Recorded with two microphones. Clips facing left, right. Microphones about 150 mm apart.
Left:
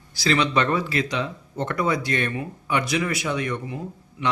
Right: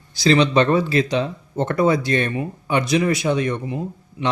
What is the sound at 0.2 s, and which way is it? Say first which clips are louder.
Speech: right 6 dB; 25° right (ahead or behind).